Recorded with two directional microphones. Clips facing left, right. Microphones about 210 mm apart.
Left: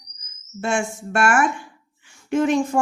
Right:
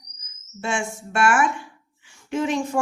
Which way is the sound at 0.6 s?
50° left (ahead or behind).